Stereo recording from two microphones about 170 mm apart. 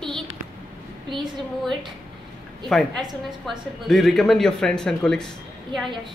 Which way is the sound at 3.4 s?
Centre (ahead or behind).